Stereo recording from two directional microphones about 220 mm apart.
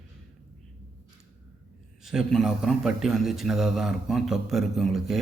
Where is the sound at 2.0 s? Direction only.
Centre (ahead or behind).